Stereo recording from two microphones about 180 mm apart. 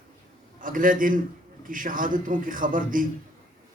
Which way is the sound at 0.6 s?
50° right (ahead or behind).